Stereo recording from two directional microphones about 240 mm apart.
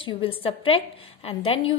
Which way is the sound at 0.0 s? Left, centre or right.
Left.